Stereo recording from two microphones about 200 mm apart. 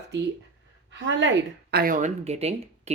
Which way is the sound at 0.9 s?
65° right (ahead or behind).